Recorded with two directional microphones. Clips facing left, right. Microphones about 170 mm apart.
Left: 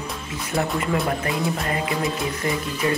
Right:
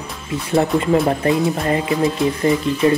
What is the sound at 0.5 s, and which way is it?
Speech, 30° right (ahead or behind).